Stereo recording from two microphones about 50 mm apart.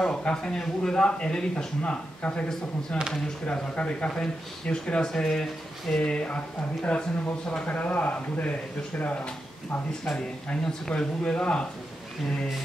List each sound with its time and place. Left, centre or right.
0.0 s speech: centre
3.4 s speech: left
7.6 s speech: left
10.5 s speech: centre